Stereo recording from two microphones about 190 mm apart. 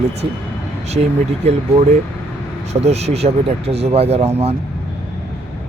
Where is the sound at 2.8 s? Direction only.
35° right (ahead or behind).